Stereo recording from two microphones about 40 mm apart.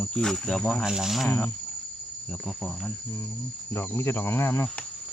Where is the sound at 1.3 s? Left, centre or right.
Left.